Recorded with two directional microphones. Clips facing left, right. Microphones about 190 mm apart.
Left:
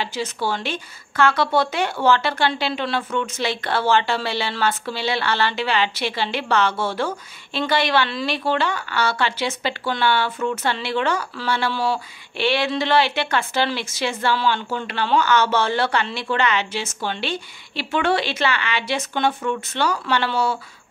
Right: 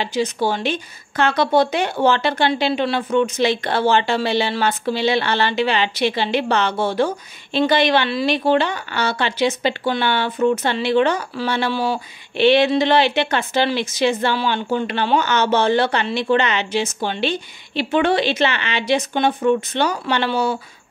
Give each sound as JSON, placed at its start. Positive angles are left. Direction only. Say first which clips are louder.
{"t": 0.0, "sound": "speech", "louder": "right 5 dB", "side_deg": -15}